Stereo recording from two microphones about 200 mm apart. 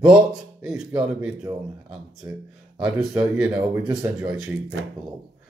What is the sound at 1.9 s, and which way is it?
Speech, 5° right (ahead or behind).